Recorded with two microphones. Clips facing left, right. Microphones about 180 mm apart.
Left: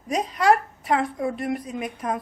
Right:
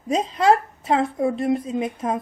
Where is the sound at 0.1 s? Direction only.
25° right (ahead or behind).